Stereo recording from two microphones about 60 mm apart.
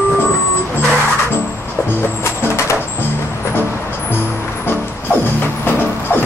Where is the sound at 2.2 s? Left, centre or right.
Left.